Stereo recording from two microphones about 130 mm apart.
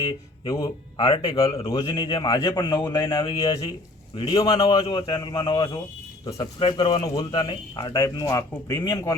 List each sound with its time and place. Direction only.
0.0 s a man's voice: 30° left (ahead or behind)